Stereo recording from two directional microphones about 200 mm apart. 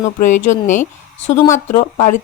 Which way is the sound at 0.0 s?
40° left (ahead or behind).